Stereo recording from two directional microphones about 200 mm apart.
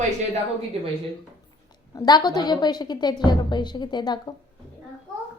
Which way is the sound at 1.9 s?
20° left (ahead or behind).